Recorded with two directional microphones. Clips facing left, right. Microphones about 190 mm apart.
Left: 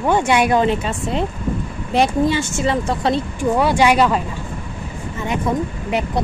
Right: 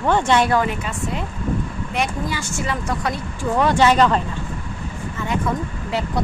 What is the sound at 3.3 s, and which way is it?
Speech, 15° left (ahead or behind).